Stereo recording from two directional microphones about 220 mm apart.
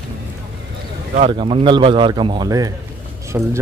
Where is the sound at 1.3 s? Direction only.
25° right (ahead or behind); by 3.5 s 10° right (ahead or behind).